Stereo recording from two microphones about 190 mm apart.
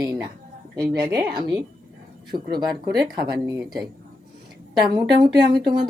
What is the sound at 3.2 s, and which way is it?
Speech, 20° right (ahead or behind).